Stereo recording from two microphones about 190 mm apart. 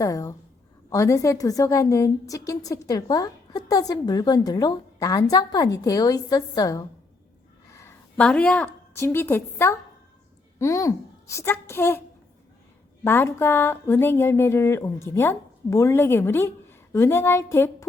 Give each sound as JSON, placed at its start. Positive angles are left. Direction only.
{"t": 0.0, "sound": "a woman's voice", "side_deg": 15}
{"t": 7.7, "sound": "a sound", "side_deg": 15}
{"t": 8.1, "sound": "a woman's voice", "side_deg": 5}
{"t": 13.1, "sound": "speech", "side_deg": 10}